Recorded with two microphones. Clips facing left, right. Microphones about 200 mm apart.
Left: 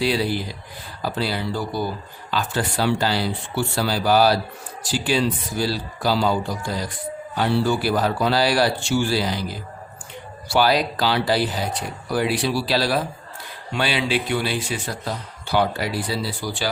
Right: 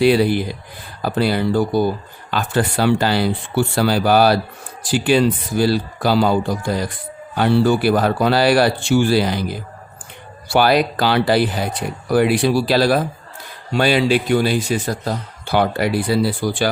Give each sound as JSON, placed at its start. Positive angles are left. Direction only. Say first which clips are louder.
{"t": 0.0, "sound": "a man's voice", "louder": "right 8 dB", "side_deg": -55}